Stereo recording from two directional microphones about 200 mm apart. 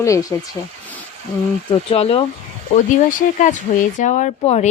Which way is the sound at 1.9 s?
30° left (ahead or behind).